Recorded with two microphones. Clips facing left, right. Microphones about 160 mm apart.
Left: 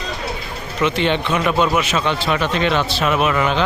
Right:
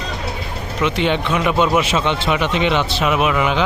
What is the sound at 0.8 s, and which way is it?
A man's voice, 10° right (ahead or behind).